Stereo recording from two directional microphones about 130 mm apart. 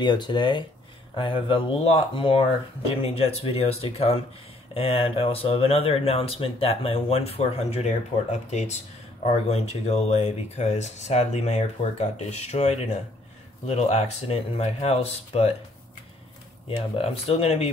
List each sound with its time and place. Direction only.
0.0 s speech: 35° left (ahead or behind); by 15.5 s 55° left (ahead or behind)
16.6 s speech: 50° left (ahead or behind)